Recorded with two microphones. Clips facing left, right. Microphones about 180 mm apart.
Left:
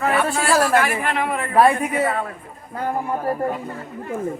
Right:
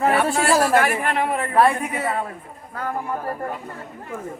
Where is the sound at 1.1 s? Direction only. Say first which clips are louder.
Right 1 dB; 40° right (ahead or behind).